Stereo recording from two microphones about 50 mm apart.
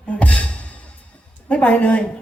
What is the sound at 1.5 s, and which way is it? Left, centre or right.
Speech, left.